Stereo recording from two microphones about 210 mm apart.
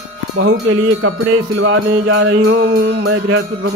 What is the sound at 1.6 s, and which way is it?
Music, 65° right (ahead or behind).